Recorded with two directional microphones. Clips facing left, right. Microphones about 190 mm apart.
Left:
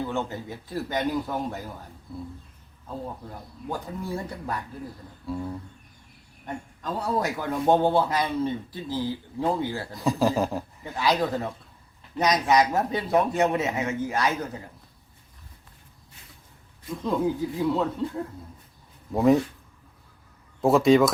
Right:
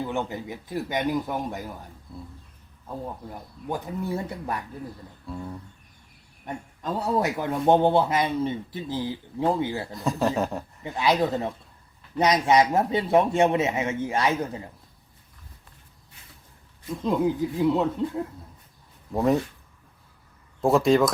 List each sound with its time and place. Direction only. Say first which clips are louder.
0.0 s speech: even; 15° right (ahead or behind)
2.8 s a man's voice: right 1 dB; 15° right (ahead or behind)
5.2 s speech: left 4 dB; 5° left (ahead or behind)
6.4 s a man's voice: right 1 dB; 20° right (ahead or behind)
9.9 s speech: left 4 dB; centre (ahead or behind)
10.8 s a man's voice: right 2 dB; 20° right (ahead or behind)
17.0 s a man's voice: right 2 dB; 20° right (ahead or behind)
19.1 s speech: left 3 dB; centre (ahead or behind)
20.6 s speech: left 1 dB; centre (ahead or behind)